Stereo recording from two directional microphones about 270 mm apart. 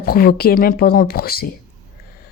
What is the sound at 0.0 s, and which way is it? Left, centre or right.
Speech, left.